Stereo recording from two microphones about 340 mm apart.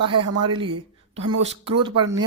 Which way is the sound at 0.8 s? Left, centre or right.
Right.